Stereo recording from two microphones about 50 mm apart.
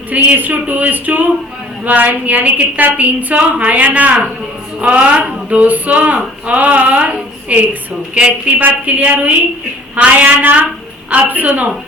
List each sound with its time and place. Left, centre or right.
0.1 s a woman's voice: right